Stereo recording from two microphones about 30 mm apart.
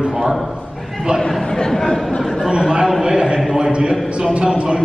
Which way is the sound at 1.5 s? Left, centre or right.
Centre.